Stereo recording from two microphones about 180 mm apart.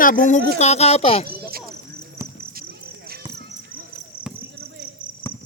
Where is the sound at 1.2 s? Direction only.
55° right (ahead or behind).